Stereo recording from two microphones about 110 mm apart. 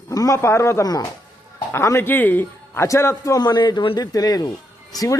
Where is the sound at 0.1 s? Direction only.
30° left (ahead or behind).